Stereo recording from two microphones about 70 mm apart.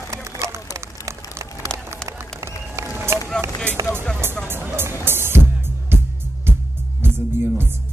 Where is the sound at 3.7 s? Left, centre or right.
Right.